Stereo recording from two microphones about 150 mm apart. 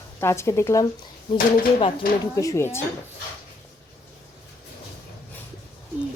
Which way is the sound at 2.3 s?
20° left (ahead or behind).